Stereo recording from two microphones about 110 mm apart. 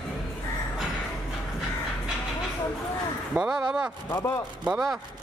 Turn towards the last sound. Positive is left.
turn(degrees=-5)  # may be behind; listen again after turning